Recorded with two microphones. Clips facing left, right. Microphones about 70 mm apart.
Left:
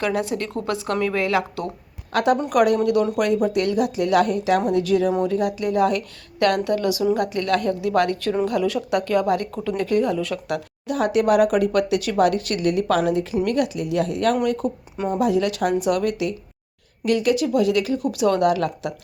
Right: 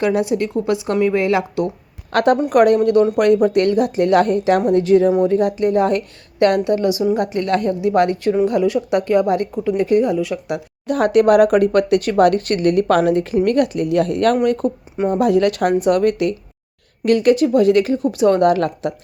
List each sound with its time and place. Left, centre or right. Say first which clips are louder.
0.0 s a woman's voice: right 6 dB; right
2.1 s speech: right 4 dB; right
2.5 s speech: right 5 dB; right
3.2 s speech: right 6 dB; right
4.7 s a woman's voice: right 6 dB; right; by 10.6 s centre
10.8 s speech: right 6 dB; right
14.9 s speech: right 6 dB; right
15.2 s speech: right 5 dB; right